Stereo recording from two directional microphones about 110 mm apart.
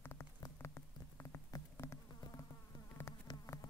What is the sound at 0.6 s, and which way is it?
Insect, 25° left (ahead or behind).